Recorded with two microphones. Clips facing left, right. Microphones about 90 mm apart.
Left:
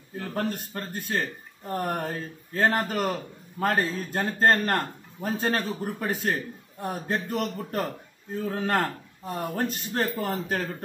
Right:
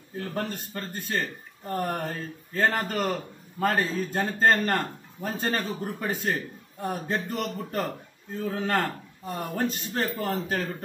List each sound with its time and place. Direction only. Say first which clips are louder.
0.1 s speech: left 2 dB; centre (ahead or behind)